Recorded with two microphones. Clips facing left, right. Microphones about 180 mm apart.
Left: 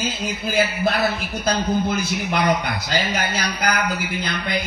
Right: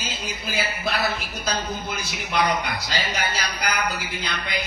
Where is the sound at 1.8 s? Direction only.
50° left (ahead or behind).